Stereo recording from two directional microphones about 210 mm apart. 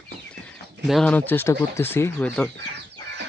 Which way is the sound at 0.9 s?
5° left (ahead or behind).